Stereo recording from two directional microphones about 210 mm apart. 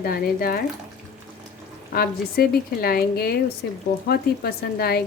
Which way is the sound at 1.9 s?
45° left (ahead or behind).